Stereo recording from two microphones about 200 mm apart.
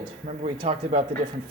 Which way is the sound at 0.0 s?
30° right (ahead or behind).